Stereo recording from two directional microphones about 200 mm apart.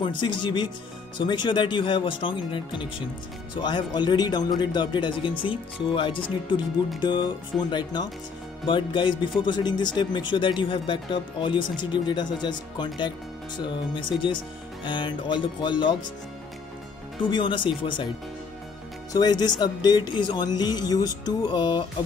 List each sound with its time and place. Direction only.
0.0 s speech: 25° left (ahead or behind)
17.2 s speech: 25° left (ahead or behind)
19.1 s speech: 20° left (ahead or behind)